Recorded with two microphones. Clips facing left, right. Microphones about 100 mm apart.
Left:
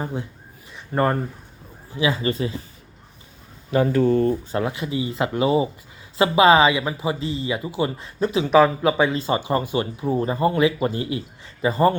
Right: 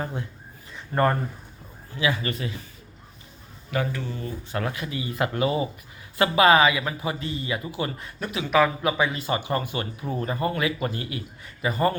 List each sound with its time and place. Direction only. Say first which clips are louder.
0.0 s speech: left 3 dB; 15° left (ahead or behind)
3.7 s speech: left 9 dB; 30° left (ahead or behind)
4.0 s speech: left 15 dB; 50° left (ahead or behind)
4.5 s speech: left 5 dB; 20° left (ahead or behind)